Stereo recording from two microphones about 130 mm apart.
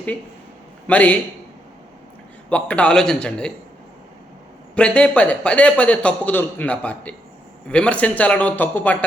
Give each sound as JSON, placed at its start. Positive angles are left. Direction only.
{"t": 0.9, "sound": "a man's voice", "side_deg": 10}
{"t": 2.5, "sound": "a man's voice", "side_deg": 10}
{"t": 4.7, "sound": "a man's voice", "side_deg": 10}